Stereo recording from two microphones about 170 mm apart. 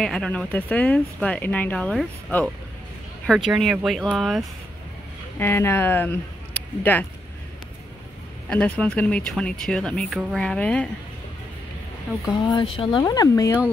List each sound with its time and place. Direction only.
0.0 s speech: 5° left (ahead or behind)
5.4 s speech: 15° left (ahead or behind)
8.5 s speech: 5° left (ahead or behind)
12.3 s speech: 25° left (ahead or behind)